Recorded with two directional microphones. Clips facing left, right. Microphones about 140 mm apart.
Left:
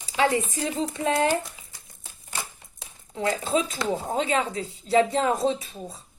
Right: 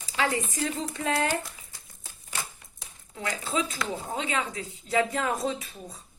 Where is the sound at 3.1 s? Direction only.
30° left (ahead or behind).